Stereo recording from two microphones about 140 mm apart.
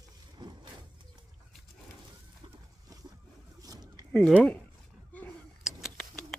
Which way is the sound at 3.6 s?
25° right (ahead or behind).